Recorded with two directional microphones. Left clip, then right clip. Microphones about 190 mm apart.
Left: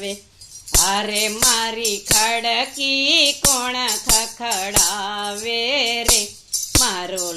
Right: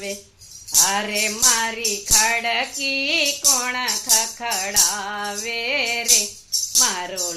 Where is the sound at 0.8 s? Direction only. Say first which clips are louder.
Left 1 dB; 35° left (ahead or behind).